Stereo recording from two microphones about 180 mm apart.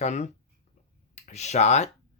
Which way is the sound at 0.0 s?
40° left (ahead or behind).